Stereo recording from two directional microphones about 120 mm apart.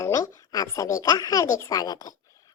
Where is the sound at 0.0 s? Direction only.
30° left (ahead or behind).